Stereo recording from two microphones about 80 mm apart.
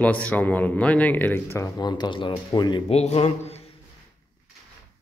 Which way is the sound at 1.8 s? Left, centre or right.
Left.